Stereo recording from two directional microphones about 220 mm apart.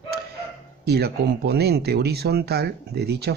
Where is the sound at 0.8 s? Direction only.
45° right (ahead or behind).